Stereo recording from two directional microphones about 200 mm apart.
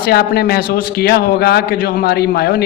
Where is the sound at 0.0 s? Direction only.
50° left (ahead or behind).